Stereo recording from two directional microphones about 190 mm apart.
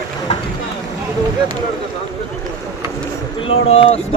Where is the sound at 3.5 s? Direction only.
30° left (ahead or behind).